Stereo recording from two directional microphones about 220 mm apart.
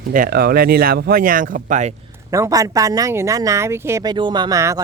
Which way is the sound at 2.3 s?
15° right (ahead or behind).